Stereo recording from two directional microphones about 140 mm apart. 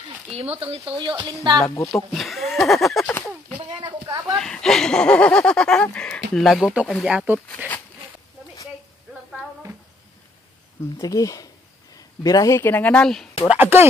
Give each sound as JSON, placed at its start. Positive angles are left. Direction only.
{"t": 0.3, "sound": "speech", "side_deg": -45}
{"t": 1.8, "sound": "speech", "side_deg": 20}
{"t": 2.1, "sound": "a sound", "side_deg": 0}
{"t": 3.1, "sound": "speech", "side_deg": 15}
{"t": 3.5, "sound": "a sound", "side_deg": -35}
{"t": 4.4, "sound": "speech", "side_deg": 5}
{"t": 7.3, "sound": "speech", "side_deg": 10}
{"t": 11.0, "sound": "speech", "side_deg": 25}
{"t": 13.5, "sound": "speech", "side_deg": -15}